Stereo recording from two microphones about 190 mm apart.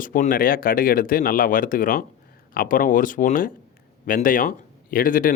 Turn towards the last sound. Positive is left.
turn(degrees=45)  # may be behind; listen again after turning